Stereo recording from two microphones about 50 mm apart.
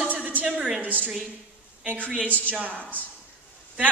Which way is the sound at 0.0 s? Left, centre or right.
Right.